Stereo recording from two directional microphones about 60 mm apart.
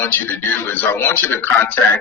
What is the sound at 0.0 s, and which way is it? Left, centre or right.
Speech, left.